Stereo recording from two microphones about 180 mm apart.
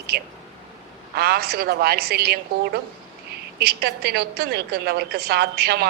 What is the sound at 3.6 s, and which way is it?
A woman's voice, 60° right (ahead or behind).